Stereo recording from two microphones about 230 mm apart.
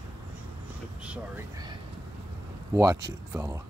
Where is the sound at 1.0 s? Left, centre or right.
Centre.